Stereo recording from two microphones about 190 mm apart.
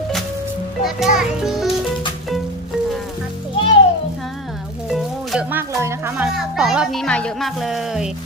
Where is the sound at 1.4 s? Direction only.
Centre (ahead or behind).